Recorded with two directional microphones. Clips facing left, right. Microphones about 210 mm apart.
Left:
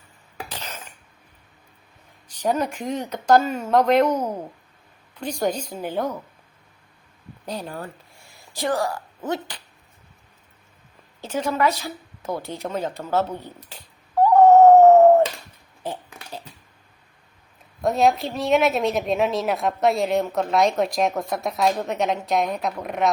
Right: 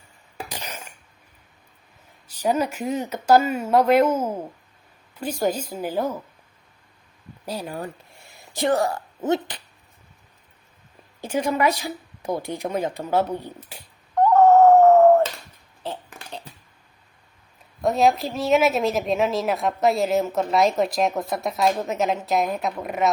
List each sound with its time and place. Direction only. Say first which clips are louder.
0.4 s a sound: right 1 dB; 15° right (ahead or behind)
2.2 s a woman's voice: right 1 dB; 5° right (ahead or behind)
7.4 s speech: right 1 dB; 5° right (ahead or behind)
8.5 s speech: right 3 dB; 25° right (ahead or behind)
11.2 s speech: right 1 dB; 15° right (ahead or behind)
14.2 s dog: left 2 dB; 15° left (ahead or behind)
15.8 s a sound: left 1 dB; 10° left (ahead or behind)
17.8 s a woman's voice: even; centre (ahead or behind)